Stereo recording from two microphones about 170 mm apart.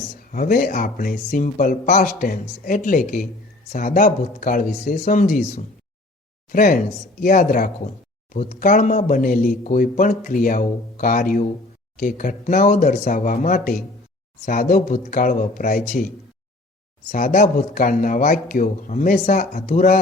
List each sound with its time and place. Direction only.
0.3 s speech: 55° left (ahead or behind)